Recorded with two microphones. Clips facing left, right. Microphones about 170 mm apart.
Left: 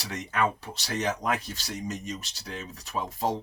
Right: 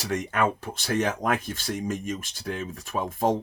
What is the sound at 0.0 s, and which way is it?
Speech, 50° right (ahead or behind).